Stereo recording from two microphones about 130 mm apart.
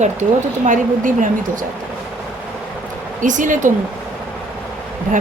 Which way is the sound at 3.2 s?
80° right.